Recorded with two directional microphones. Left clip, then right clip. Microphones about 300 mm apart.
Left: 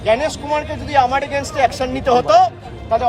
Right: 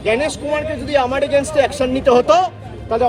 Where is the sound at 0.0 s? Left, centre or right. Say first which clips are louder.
Left 1 dB; centre.